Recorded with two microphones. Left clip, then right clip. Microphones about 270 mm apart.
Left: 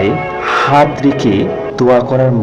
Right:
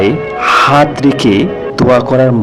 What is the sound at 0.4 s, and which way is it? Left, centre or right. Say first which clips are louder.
A man's voice: right 3 dB; right.